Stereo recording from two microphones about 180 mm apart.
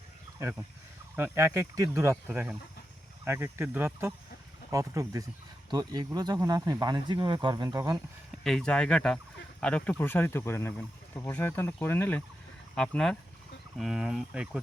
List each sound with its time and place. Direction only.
1.1 s speech: 15° right (ahead or behind)
8.4 s speech: 5° left (ahead or behind)